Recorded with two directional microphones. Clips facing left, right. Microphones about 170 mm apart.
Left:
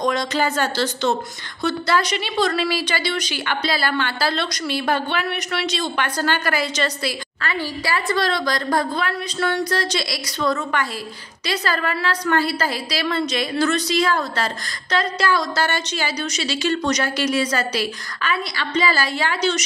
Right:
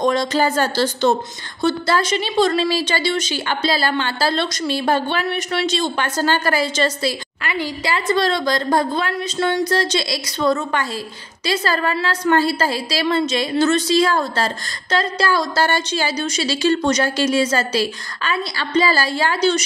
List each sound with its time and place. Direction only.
0.0 s a woman's voice: 30° right (ahead or behind)
7.4 s a woman's voice: 20° right (ahead or behind)